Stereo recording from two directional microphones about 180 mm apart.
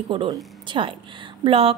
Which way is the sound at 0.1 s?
30° right (ahead or behind).